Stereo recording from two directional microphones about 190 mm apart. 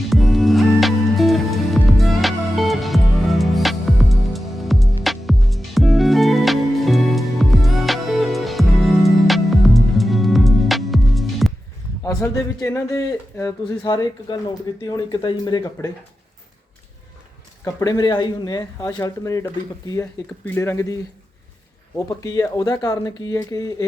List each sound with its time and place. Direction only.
0.0 s music: centre (ahead or behind)
12.0 s speech: 15° left (ahead or behind)
17.7 s speech: 20° left (ahead or behind)